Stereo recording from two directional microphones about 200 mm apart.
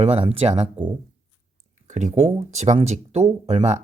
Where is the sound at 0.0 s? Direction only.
30° right (ahead or behind).